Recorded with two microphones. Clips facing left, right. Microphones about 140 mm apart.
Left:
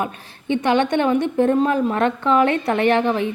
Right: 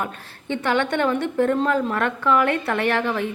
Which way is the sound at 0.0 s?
15° left (ahead or behind).